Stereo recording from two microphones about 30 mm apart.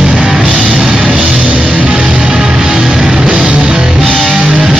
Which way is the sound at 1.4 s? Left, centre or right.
Right.